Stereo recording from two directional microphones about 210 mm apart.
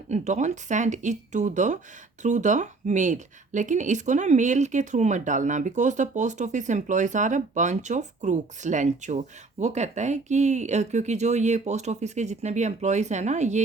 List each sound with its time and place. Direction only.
0.1 s speech: 35° right (ahead or behind)